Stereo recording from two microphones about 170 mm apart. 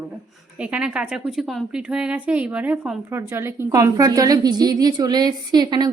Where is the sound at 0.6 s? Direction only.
10° right (ahead or behind).